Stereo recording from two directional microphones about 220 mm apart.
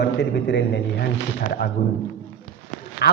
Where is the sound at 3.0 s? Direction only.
45° left (ahead or behind).